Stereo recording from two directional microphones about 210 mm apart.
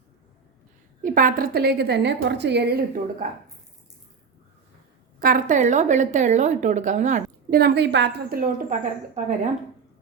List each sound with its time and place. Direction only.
1.0 s a woman's voice: 40° right (ahead or behind)
5.2 s a woman's voice: 40° right (ahead or behind)
7.6 s a woman's voice: 55° right (ahead or behind); by 9.5 s 40° right (ahead or behind)